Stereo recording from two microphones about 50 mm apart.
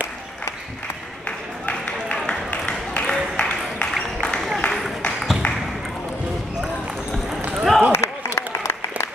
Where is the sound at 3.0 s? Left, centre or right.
Centre.